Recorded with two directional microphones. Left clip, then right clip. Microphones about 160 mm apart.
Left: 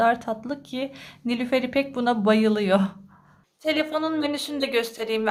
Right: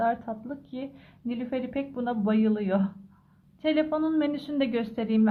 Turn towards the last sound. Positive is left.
turn(degrees=20)  # may be behind; listen again after turning